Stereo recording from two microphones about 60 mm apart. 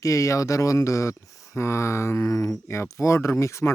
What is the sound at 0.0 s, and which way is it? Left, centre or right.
Speech, left.